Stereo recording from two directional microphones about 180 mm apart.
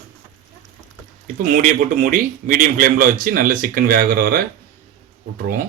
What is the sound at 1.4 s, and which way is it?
A man's voice, 50° right (ahead or behind).